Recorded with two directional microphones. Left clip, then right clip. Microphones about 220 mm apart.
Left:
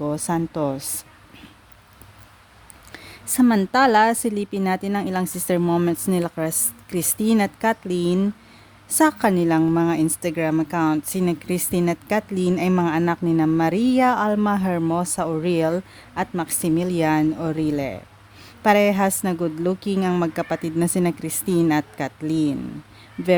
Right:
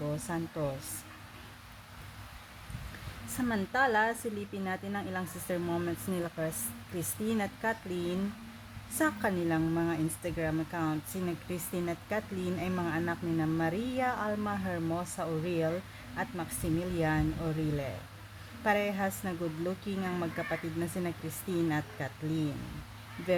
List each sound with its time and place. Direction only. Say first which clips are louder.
0.3 s a woman's voice: left 14 dB; 45° left (ahead or behind)
3.3 s a woman's voice: left 13 dB; 45° left (ahead or behind)